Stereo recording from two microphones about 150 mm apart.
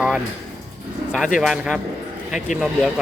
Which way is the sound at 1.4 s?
5° right (ahead or behind).